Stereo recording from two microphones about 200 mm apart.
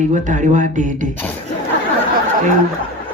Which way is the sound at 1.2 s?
10° left (ahead or behind).